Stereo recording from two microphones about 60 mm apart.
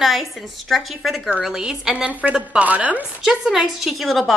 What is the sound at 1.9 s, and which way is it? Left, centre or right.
A woman's voice, right.